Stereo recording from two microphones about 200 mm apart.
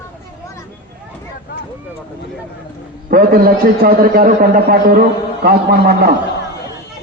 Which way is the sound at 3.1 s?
50° right (ahead or behind).